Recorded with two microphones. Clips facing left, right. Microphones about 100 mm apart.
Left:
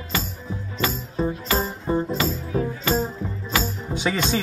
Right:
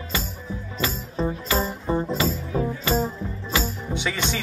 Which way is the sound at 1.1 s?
20° left (ahead or behind).